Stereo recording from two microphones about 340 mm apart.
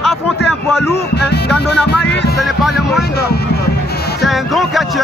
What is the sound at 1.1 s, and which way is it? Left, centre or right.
Music, left.